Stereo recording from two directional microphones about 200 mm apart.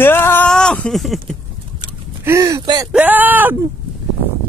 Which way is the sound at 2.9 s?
10° right (ahead or behind).